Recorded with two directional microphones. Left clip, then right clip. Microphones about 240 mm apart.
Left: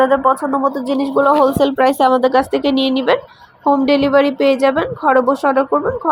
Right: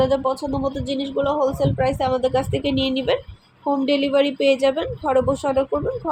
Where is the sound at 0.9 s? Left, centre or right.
Left.